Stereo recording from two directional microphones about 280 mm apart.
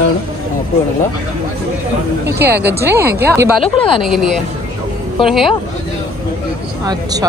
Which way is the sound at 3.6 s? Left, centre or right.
Centre.